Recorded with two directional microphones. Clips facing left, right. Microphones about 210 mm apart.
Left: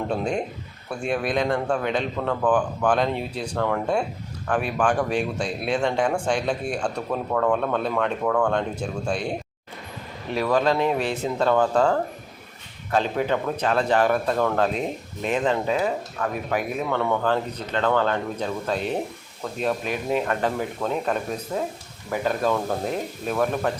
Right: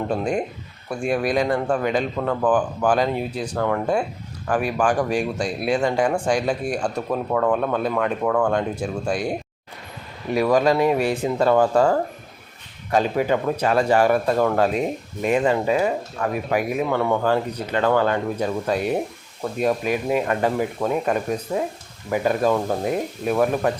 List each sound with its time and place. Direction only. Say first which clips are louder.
0.1 s speech: right 2 dB; 5° right (ahead or behind)
10.3 s speech: right 4 dB; 10° right (ahead or behind)